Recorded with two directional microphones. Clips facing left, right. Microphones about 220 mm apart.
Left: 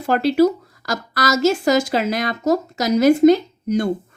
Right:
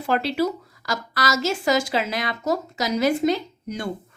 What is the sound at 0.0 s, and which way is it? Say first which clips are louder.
A woman's voice: left 7 dB; 45° left (ahead or behind).